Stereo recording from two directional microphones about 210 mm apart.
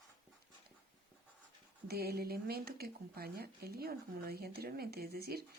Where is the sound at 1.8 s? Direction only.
45° right (ahead or behind).